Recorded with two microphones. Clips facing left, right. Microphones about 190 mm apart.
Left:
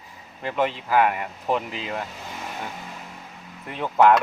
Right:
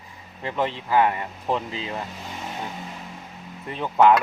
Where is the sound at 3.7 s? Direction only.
5° left (ahead or behind).